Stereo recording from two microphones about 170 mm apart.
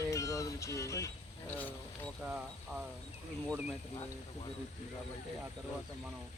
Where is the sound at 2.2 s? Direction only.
5° right (ahead or behind).